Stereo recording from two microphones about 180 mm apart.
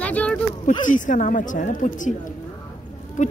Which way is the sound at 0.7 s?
45° left (ahead or behind).